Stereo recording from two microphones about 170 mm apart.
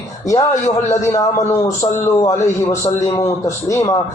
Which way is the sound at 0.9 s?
20° left (ahead or behind).